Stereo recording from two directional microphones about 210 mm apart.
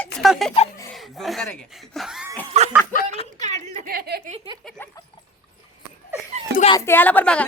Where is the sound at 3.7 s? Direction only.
45° right (ahead or behind).